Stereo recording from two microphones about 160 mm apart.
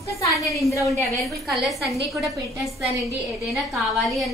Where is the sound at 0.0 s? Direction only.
20° left (ahead or behind).